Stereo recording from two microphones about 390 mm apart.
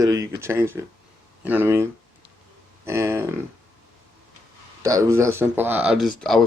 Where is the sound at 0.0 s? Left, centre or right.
Centre.